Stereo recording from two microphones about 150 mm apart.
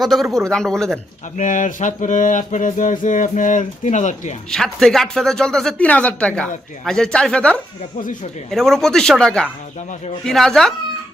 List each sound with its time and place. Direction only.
0.0 s speech: centre (ahead or behind)
1.4 s a sound: 55° left (ahead or behind)
4.5 s speech: centre (ahead or behind)